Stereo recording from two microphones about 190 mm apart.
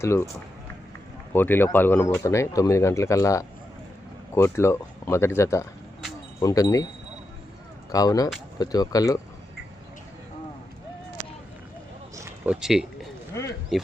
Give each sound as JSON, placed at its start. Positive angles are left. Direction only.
{"t": 0.0, "sound": "speech", "side_deg": 15}
{"t": 1.3, "sound": "speech", "side_deg": 10}
{"t": 7.9, "sound": "speech", "side_deg": 20}
{"t": 12.1, "sound": "a sound", "side_deg": -15}
{"t": 12.5, "sound": "speech", "side_deg": 0}